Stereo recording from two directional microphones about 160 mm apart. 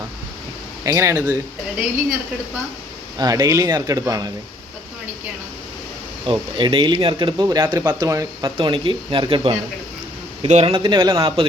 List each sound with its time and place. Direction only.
0.9 s speech: 20° right (ahead or behind)
3.2 s speech: 25° right (ahead or behind)
6.2 s a man's voice: 30° right (ahead or behind)